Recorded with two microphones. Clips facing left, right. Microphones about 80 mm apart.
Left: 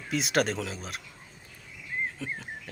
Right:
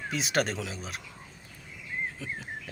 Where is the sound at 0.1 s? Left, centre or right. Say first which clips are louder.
Left 3 dB; centre.